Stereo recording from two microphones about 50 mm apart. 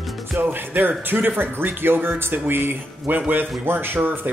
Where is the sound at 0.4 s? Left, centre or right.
Right.